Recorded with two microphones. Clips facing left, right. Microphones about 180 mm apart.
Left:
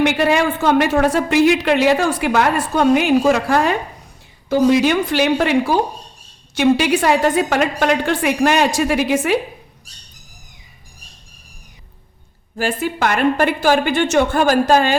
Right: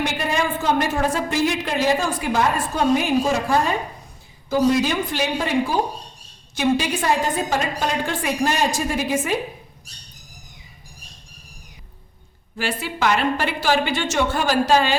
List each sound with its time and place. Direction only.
0.0 s a woman's voice: 75° left (ahead or behind)
12.5 s a woman's voice: 50° left (ahead or behind)